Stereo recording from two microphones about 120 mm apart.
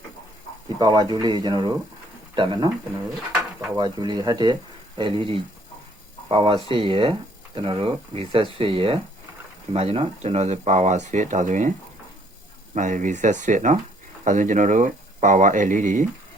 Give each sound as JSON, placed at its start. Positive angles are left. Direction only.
{"t": 0.8, "sound": "speech", "side_deg": -35}
{"t": 3.8, "sound": "speech", "side_deg": -35}
{"t": 12.7, "sound": "speech", "side_deg": -90}